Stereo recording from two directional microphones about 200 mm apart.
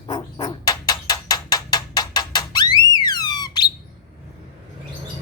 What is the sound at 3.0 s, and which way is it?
Alarm, 20° left (ahead or behind).